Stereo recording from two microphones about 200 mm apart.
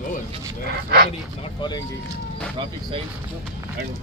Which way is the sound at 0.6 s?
50° right (ahead or behind).